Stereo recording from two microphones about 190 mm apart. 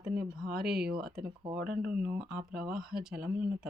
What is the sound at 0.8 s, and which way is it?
Speech, 55° right (ahead or behind).